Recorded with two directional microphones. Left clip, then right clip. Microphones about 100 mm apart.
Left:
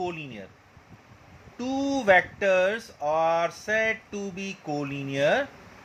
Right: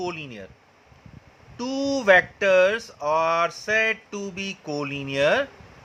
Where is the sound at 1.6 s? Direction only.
25° right (ahead or behind).